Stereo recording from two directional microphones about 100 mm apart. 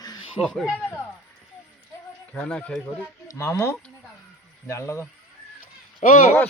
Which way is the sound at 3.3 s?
30° left (ahead or behind).